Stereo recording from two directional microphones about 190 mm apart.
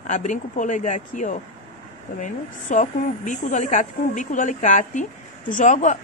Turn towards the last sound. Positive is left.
turn(degrees=40)  # may be behind; listen again after turning